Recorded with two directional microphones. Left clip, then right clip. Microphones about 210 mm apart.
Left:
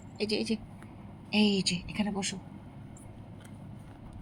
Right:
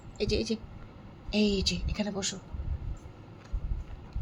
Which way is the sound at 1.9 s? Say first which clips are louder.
Right 1 dB; 25° right (ahead or behind).